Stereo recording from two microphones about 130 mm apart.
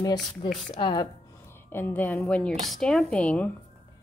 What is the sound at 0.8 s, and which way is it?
Speech, 35° left (ahead or behind).